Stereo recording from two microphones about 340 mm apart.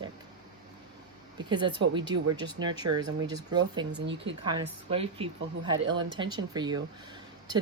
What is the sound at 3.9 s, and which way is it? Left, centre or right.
Speech, right.